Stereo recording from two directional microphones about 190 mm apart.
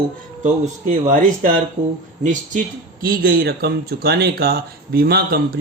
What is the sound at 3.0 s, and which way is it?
Speech, 50° right (ahead or behind).